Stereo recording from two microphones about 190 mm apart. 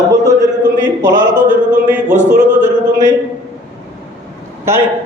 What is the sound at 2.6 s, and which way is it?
Speech, 15° right (ahead or behind).